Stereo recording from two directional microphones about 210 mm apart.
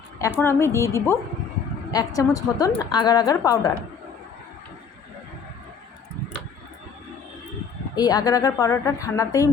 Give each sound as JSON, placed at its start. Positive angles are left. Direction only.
{"t": 0.2, "sound": "a woman's voice", "side_deg": 10}
{"t": 7.9, "sound": "a woman's voice", "side_deg": 20}